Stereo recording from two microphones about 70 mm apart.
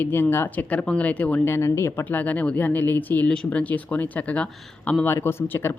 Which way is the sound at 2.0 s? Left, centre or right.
Left.